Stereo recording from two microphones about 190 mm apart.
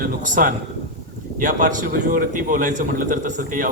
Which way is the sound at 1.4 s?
45° right (ahead or behind).